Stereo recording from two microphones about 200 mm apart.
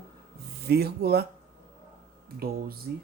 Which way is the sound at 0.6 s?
55° right (ahead or behind).